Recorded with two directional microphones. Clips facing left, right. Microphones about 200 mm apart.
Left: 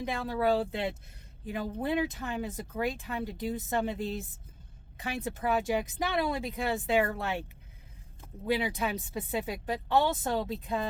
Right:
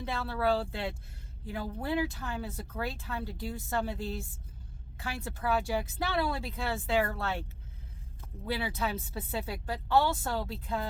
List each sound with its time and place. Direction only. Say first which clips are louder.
0.0 s speech: left 2 dB; 15° left (ahead or behind)